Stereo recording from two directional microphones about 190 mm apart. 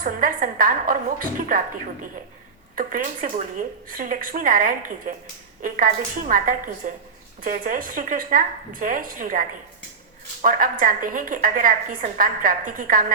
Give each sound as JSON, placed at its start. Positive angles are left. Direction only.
{"t": 0.0, "sound": "a woman's voice", "side_deg": -45}